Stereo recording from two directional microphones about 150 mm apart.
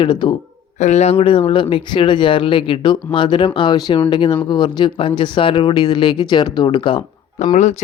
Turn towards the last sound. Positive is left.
turn(degrees=55)  # may be behind; listen again after turning